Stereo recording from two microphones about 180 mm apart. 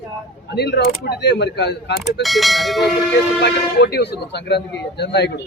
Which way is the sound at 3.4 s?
60° left (ahead or behind).